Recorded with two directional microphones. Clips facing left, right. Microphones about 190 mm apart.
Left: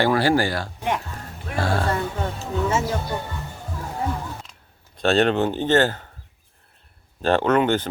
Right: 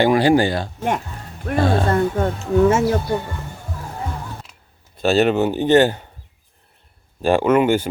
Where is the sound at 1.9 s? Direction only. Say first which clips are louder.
Right 7 dB; 50° right (ahead or behind).